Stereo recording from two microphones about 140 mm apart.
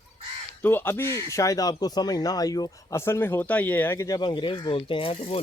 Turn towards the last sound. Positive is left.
turn(degrees=40)  # may be behind; listen again after turning